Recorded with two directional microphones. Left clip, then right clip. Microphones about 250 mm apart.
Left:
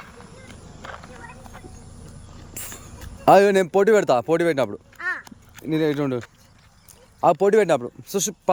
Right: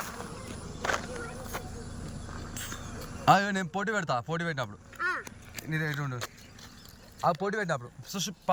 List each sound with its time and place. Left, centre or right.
0.8 s walk: right
2.6 s a sound: left
3.2 s speech: left
7.3 s speech: left